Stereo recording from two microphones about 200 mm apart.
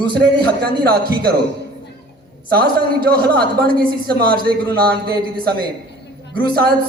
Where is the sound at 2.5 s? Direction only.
50° right (ahead or behind).